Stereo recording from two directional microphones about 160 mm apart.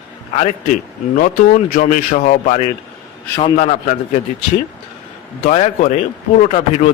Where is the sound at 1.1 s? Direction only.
55° left (ahead or behind).